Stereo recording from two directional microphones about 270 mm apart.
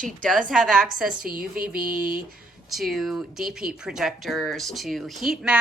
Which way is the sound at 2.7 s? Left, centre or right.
Centre.